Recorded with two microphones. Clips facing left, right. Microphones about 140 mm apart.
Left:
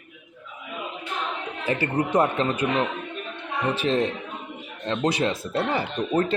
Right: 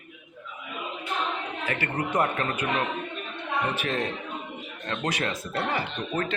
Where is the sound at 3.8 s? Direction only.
25° left (ahead or behind).